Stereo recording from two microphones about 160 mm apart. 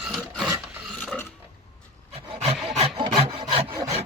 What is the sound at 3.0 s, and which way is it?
Wood, 30° right (ahead or behind).